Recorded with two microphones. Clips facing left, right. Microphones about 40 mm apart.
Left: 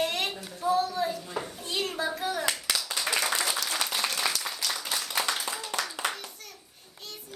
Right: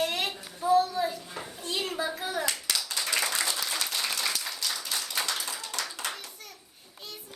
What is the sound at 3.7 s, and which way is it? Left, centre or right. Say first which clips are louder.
Applause: left 2 dB; centre.